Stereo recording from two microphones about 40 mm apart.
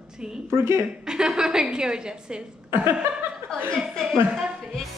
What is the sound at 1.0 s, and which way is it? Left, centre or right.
A woman's voice, centre.